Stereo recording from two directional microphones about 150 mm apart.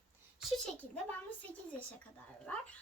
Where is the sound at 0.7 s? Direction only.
10° left (ahead or behind).